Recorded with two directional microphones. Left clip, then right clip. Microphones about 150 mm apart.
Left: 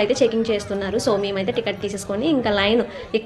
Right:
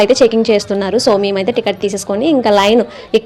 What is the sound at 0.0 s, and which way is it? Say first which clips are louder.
A woman's voice: right 9 dB; 55° right (ahead or behind).